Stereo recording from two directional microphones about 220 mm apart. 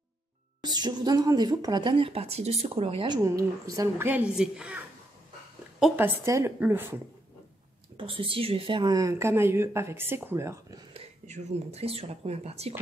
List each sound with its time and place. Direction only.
0.6 s a woman's voice: 20° right (ahead or behind)
8.0 s a woman's voice: 25° right (ahead or behind)
10.9 s speech: 30° right (ahead or behind)